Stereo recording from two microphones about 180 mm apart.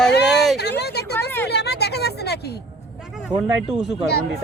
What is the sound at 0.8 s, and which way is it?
Speech, 65° left (ahead or behind).